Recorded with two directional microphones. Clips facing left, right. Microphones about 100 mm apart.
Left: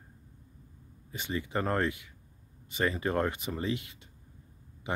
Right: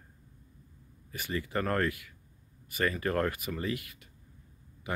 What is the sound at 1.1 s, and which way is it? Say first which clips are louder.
Speech: even; 20° left (ahead or behind).